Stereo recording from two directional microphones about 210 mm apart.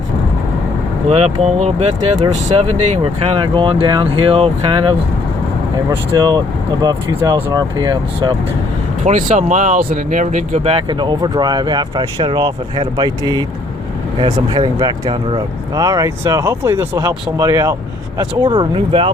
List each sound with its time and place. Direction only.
1.1 s speech: 30° right (ahead or behind)
6.1 s speech: 20° right (ahead or behind)
9.0 s speech: 35° right (ahead or behind)